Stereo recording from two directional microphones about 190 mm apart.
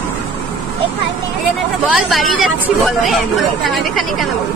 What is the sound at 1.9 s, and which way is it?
Speech, centre (ahead or behind).